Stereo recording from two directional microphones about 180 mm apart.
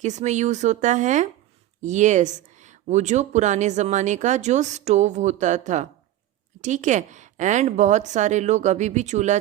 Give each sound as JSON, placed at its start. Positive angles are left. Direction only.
{"t": 0.0, "sound": "speech", "side_deg": -40}